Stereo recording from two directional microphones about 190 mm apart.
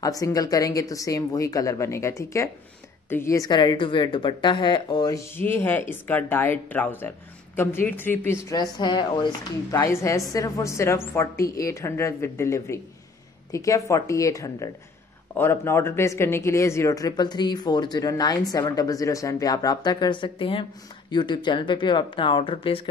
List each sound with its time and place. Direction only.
0.0 s a woman's voice: 20° left (ahead or behind)